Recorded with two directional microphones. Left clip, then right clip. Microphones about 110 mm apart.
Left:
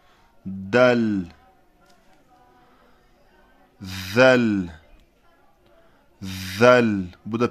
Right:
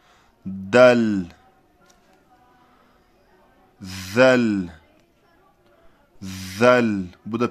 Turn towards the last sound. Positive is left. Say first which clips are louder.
# left 1 dB
turn(degrees=0)  # may be behind; listen again after turning